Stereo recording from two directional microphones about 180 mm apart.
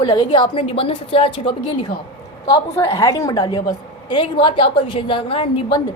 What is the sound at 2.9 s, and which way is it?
A woman's voice, 20° left (ahead or behind).